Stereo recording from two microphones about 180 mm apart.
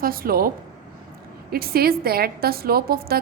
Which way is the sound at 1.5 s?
55° right (ahead or behind).